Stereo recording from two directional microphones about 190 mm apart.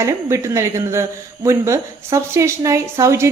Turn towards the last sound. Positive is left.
turn(degrees=-15)  # may be behind; listen again after turning